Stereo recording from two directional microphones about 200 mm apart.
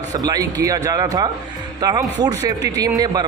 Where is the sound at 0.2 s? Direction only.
20° right (ahead or behind).